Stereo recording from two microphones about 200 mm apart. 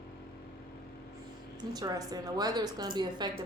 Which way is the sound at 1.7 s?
20° right (ahead or behind).